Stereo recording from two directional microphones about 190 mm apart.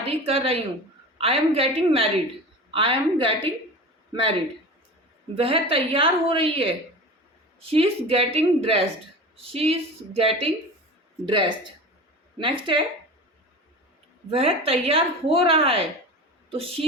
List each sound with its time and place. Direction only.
0.1 s a woman's voice: 30° right (ahead or behind)
14.3 s a woman's voice: 30° right (ahead or behind)